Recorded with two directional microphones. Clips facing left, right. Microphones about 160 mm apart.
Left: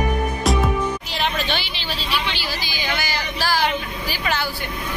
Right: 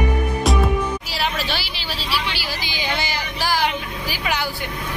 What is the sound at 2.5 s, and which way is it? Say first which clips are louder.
Vehicle: right 1 dB; 20° right (ahead or behind).